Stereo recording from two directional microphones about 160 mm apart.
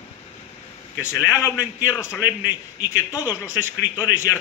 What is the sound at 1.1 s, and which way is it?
A man's voice, 20° left (ahead or behind).